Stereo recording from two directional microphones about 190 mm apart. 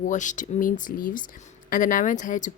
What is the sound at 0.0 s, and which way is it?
Speech, 40° left (ahead or behind).